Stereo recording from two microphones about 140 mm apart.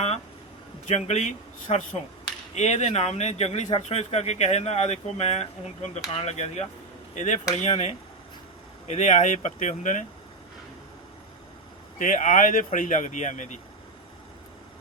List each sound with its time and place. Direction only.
0.9 s speech: 50° left (ahead or behind)
11.9 s speech: 65° left (ahead or behind)